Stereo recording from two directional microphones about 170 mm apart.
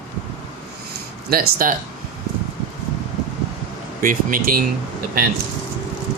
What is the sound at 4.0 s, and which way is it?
Speech, 55° right (ahead or behind).